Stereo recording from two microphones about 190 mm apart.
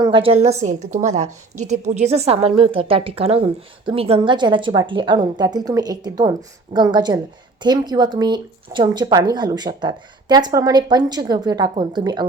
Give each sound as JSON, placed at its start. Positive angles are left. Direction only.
{"t": 0.0, "sound": "a woman's voice", "side_deg": -25}